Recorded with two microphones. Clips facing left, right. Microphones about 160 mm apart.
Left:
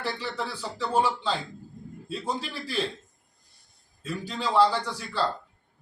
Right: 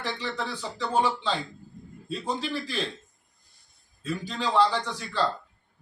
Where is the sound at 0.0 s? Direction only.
10° left (ahead or behind).